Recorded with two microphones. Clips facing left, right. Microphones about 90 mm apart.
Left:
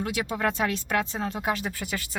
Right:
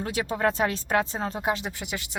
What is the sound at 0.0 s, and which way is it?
Speech, 35° right (ahead or behind).